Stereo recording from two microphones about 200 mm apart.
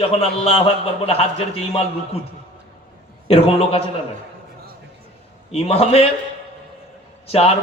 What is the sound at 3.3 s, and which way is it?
Speech, 30° left (ahead or behind).